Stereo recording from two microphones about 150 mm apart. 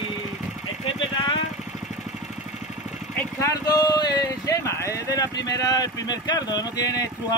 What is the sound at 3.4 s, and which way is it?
Speech, 25° left (ahead or behind).